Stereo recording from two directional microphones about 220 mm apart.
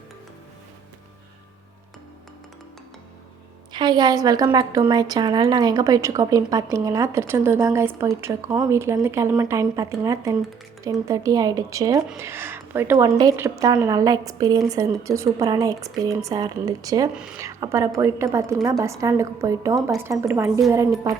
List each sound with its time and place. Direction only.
3.7 s a woman's voice: 20° right (ahead or behind)
17.2 s a woman's voice: 5° right (ahead or behind)